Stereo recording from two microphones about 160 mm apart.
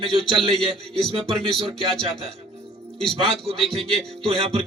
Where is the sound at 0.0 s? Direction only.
35° right (ahead or behind).